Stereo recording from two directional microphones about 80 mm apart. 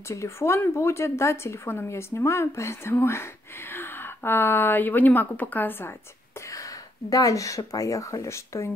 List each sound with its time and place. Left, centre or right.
0.1 s speech: left
6.5 s speech: left